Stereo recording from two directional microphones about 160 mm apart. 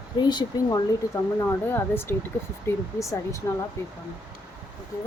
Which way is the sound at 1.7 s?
15° left (ahead or behind).